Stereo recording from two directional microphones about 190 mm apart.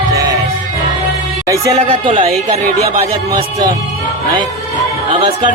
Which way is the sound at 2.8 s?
50° right (ahead or behind).